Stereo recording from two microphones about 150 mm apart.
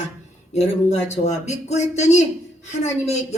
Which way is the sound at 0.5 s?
50° left (ahead or behind).